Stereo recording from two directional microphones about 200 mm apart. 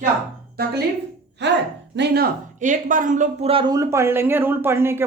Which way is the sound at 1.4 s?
60° right (ahead or behind).